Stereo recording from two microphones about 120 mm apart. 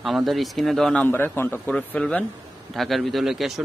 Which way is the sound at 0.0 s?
Centre (ahead or behind).